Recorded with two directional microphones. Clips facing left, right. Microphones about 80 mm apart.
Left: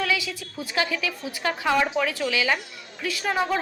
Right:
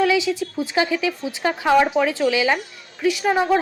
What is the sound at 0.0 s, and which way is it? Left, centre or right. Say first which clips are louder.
A woman's voice: right 8 dB; right.